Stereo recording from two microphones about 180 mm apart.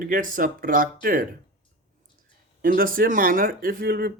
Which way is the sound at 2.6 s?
50° right (ahead or behind).